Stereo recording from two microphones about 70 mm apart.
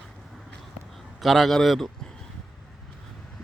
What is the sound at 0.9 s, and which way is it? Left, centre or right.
Speech, centre.